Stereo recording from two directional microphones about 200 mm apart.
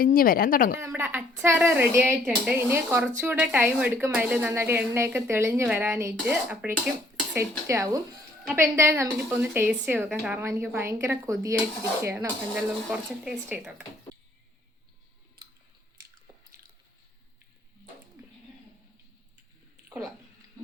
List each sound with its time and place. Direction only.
0.0 s speech: 45° left (ahead or behind)
0.8 s a woman's voice: 10° right (ahead or behind)